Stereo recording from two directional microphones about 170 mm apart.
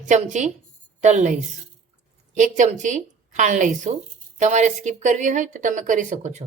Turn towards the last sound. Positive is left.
turn(degrees=-45)  # may be behind; listen again after turning